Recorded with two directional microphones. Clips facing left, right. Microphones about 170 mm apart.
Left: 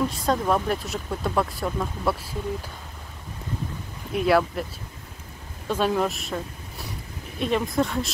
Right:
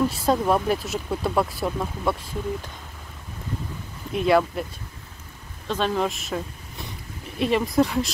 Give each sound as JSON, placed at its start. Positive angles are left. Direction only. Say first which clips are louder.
{"t": 0.0, "sound": "speech", "louder": "right 2 dB", "side_deg": -5}
{"t": 4.1, "sound": "speech", "louder": "right 1 dB", "side_deg": 5}
{"t": 5.7, "sound": "speech", "louder": "left 1 dB", "side_deg": 10}